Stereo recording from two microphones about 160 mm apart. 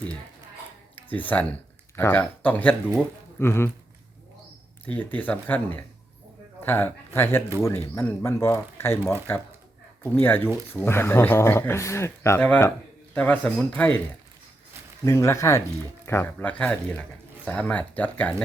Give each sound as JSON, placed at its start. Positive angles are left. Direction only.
{"t": 0.9, "sound": "speech", "side_deg": 10}
{"t": 4.9, "sound": "speech", "side_deg": 10}
{"t": 15.0, "sound": "speech", "side_deg": 20}